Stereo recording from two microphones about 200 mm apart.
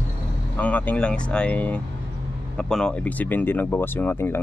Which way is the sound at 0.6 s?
5° left (ahead or behind).